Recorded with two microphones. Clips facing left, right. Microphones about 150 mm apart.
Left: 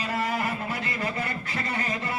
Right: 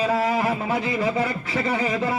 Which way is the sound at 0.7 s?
90° right.